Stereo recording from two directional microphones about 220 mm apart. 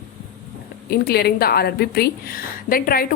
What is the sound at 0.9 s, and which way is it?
A woman's voice, 45° left (ahead or behind).